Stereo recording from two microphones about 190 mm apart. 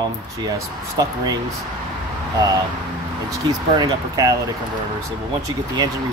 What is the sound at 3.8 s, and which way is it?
Speech, 15° right (ahead or behind).